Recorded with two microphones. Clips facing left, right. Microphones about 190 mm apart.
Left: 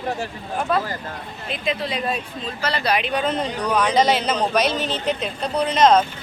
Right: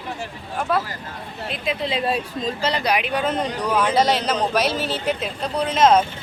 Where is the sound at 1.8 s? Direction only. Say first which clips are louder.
Right 2 dB; 25° right (ahead or behind).